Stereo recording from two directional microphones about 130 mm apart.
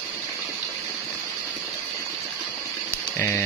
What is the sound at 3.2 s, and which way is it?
Speech, 20° left (ahead or behind).